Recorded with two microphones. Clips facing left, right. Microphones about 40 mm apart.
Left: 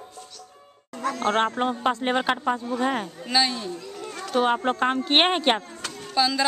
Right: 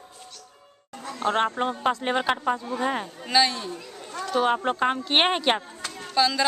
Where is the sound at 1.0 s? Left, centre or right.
Left.